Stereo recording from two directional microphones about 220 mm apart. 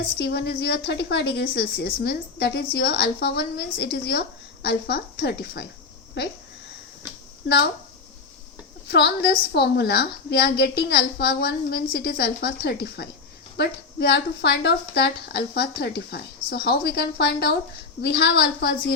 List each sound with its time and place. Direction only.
0.2 s a woman's voice: 50° left (ahead or behind)
7.4 s speech: 50° left (ahead or behind)
8.9 s a woman's voice: 50° left (ahead or behind)